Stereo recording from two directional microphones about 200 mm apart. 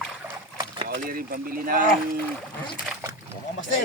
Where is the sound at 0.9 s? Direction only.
45° right (ahead or behind).